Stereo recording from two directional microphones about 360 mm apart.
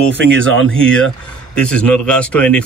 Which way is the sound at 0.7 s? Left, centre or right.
Centre.